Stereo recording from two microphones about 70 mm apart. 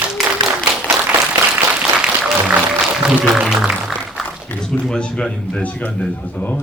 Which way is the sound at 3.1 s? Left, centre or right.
Centre.